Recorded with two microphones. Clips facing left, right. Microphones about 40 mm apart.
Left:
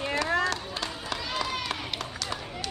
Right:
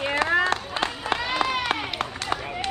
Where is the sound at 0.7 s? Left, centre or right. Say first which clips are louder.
Right 7 dB; right.